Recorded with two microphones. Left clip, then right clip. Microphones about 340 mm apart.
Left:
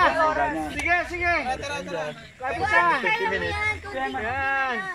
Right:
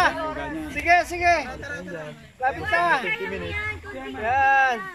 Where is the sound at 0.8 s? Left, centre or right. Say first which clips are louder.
Right 5 dB; right.